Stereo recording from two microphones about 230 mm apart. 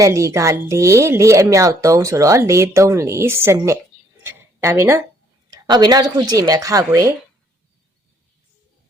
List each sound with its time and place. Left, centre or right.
0.0 s speech: centre
4.2 s a sound: centre
5.6 s speech: centre